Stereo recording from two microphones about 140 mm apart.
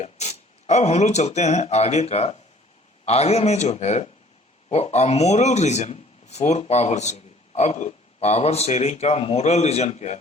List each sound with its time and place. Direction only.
0.0 s speech: 55° left (ahead or behind)